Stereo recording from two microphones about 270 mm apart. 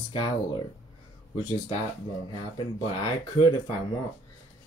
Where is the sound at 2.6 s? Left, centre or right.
Centre.